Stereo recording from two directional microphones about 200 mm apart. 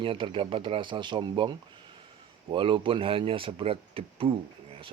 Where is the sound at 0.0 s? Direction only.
25° right (ahead or behind).